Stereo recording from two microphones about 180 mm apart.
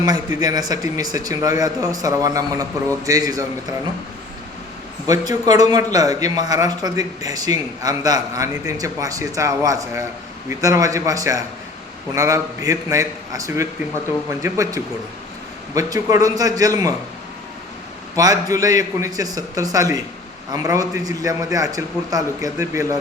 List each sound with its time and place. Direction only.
0.0 s a man's voice: 20° right (ahead or behind)
5.0 s a man's voice: 20° right (ahead or behind)
18.2 s a man's voice: 20° right (ahead or behind)